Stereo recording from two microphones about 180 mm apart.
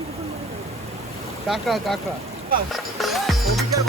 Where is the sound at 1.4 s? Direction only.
Centre (ahead or behind).